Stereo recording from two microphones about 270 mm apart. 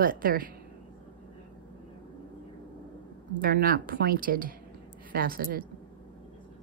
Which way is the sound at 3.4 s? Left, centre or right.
Right.